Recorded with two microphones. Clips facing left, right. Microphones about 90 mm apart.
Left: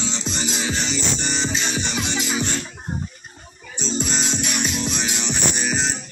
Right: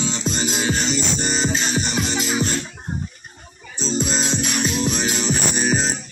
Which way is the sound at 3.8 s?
40° right (ahead or behind).